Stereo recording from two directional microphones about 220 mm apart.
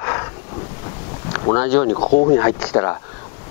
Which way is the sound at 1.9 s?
30° left (ahead or behind).